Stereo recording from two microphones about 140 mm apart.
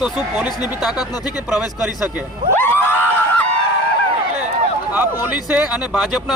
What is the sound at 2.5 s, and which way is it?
Crowd, 15° left (ahead or behind).